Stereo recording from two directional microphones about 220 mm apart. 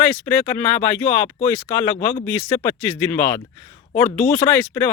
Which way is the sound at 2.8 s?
10° left (ahead or behind).